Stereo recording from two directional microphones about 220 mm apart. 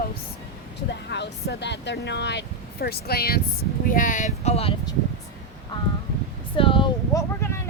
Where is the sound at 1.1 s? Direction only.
50° left (ahead or behind); by 4.9 s 25° left (ahead or behind).